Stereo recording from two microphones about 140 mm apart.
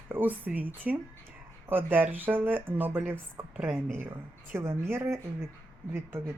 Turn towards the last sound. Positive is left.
turn(degrees=-15)  # may be behind; listen again after turning